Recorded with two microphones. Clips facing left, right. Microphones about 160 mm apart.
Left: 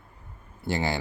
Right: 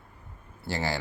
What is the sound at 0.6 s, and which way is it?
Speech, 20° left (ahead or behind).